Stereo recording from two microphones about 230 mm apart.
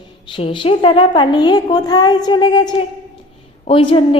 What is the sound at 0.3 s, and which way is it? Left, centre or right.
A woman's voice, left.